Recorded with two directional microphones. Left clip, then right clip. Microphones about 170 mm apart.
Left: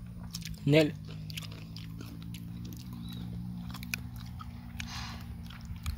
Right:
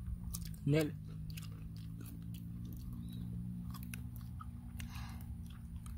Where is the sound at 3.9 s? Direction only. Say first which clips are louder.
Left 12 dB; 35° left (ahead or behind).